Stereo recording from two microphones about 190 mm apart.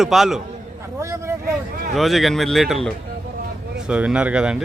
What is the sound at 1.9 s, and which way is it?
Speech, centre (ahead or behind).